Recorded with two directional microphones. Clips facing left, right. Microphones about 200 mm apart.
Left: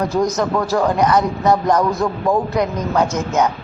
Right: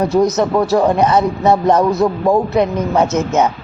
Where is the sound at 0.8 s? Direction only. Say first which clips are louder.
Right 1 dB; 25° right (ahead or behind).